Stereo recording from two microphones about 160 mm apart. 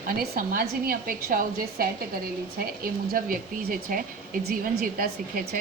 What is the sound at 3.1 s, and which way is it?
Speech, 65° right (ahead or behind).